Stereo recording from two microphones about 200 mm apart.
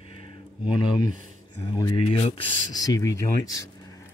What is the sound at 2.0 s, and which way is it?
Speech, 30° left (ahead or behind).